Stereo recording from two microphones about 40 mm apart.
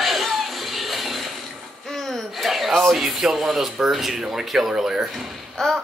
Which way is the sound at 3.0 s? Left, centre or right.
Centre.